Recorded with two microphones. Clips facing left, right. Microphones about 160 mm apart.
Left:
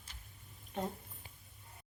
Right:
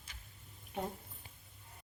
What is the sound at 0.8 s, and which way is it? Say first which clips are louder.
Speech: left 1 dB; 10° right (ahead or behind).